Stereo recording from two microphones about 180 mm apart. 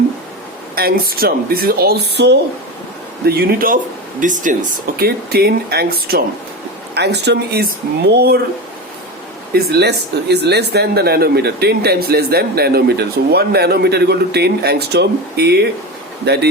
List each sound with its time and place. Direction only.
0.8 s speech: 55° right (ahead or behind)
3.2 s speech: 55° right (ahead or behind)
4.9 s speech: 60° right (ahead or behind)
9.7 s speech: 65° right (ahead or behind)